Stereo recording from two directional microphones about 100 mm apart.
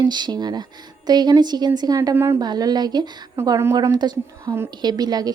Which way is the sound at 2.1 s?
25° right (ahead or behind).